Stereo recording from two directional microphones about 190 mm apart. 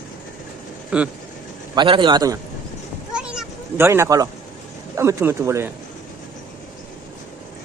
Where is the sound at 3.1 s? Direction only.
5° right (ahead or behind).